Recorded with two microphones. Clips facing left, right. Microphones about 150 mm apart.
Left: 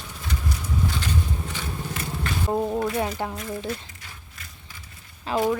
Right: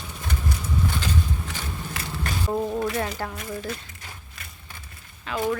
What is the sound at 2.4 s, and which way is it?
Speech, 20° left (ahead or behind).